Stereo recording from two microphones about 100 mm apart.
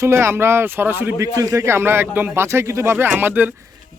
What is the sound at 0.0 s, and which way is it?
Speech, 25° right (ahead or behind).